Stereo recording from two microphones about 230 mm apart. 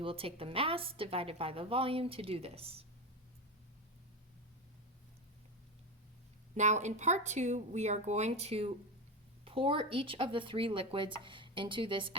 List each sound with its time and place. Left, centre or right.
0.0 s a woman's voice: right
6.5 s a woman's voice: right